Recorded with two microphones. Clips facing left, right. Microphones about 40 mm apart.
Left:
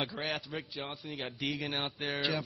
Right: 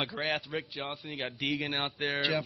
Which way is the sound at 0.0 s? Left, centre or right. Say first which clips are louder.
Right 3 dB; centre.